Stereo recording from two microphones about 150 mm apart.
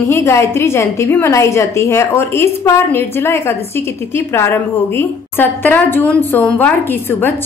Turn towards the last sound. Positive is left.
turn(degrees=15)  # may be behind; listen again after turning